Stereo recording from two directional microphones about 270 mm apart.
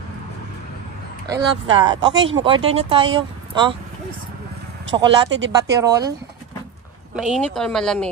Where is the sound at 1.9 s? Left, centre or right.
Centre.